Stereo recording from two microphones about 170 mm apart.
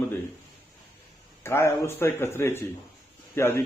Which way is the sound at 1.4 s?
15° left (ahead or behind).